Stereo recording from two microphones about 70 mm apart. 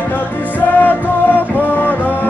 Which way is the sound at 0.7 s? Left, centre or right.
Left.